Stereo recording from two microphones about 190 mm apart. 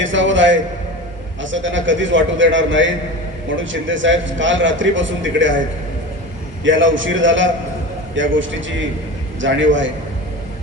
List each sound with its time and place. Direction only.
0.0 s a man's voice: 80° right
6.7 s a man's voice: 80° right